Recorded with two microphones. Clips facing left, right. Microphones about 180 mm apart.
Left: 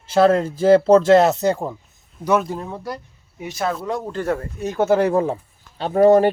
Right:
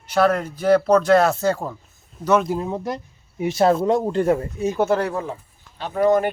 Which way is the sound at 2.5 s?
15° right (ahead or behind).